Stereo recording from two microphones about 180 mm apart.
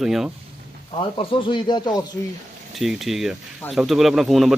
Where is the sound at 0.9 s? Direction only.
30° left (ahead or behind).